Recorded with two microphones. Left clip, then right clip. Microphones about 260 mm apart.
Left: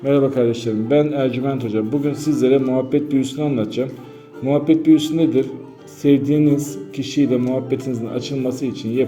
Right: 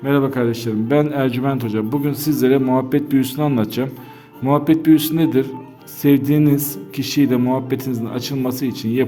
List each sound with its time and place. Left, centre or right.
0.0 s a man's voice: right